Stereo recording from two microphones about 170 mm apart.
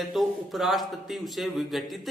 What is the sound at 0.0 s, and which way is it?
Speech, centre (ahead or behind).